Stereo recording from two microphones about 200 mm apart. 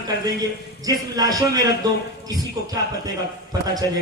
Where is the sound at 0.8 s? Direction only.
20° right (ahead or behind).